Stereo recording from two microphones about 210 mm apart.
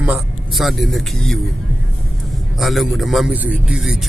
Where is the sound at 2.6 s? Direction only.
Centre (ahead or behind).